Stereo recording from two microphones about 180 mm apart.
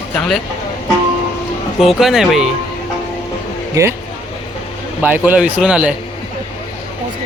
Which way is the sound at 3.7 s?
15° right (ahead or behind).